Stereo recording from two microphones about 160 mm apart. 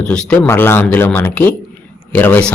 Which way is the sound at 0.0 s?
5° left (ahead or behind).